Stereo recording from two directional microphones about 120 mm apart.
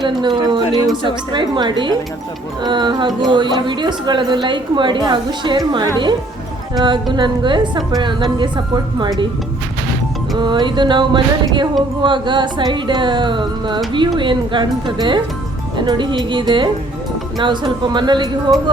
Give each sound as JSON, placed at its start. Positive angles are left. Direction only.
{"t": 0.0, "sound": "speech", "side_deg": -40}
{"t": 10.3, "sound": "speech", "side_deg": -40}